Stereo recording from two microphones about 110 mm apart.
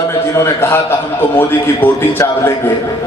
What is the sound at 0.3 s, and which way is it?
A man's voice, 20° left (ahead or behind).